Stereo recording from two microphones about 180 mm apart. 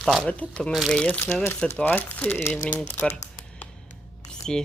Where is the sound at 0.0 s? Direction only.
Centre (ahead or behind).